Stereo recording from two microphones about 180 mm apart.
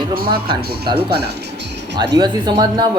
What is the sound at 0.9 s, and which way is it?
Speech, 65° right (ahead or behind).